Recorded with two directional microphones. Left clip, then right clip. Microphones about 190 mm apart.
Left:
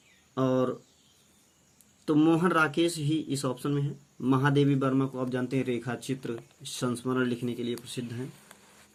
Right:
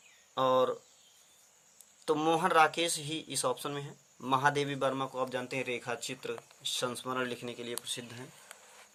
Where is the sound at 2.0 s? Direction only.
20° right (ahead or behind).